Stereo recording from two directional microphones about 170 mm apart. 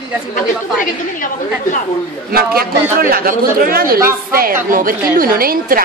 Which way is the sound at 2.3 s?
60° right (ahead or behind).